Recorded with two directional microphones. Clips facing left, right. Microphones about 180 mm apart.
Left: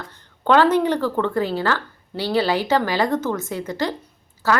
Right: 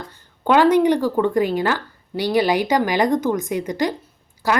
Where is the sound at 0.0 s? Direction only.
10° right (ahead or behind).